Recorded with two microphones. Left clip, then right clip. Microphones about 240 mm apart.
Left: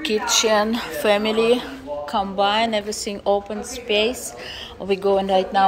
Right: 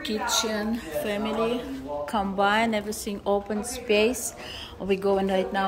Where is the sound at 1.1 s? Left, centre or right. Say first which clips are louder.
Left 11 dB; left.